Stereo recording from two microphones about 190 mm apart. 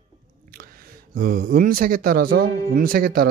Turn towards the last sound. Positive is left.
turn(degrees=-50)  # may be behind; listen again after turning